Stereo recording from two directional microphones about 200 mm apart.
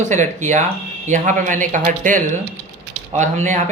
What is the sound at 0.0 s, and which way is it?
Speech, 35° right (ahead or behind).